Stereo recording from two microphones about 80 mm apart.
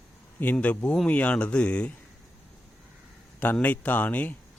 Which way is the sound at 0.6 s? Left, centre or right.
Centre.